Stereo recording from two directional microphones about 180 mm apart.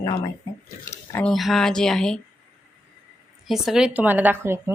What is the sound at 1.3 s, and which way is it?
Speech, centre (ahead or behind).